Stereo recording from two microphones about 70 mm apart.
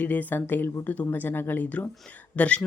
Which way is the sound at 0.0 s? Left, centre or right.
Left.